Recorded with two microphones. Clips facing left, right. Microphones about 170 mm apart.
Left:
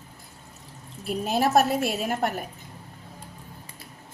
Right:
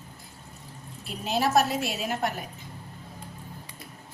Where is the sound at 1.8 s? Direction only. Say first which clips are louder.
Left 3 dB; 50° left (ahead or behind).